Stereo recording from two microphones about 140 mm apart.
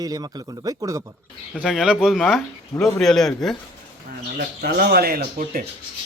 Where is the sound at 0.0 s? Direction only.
30° right (ahead or behind).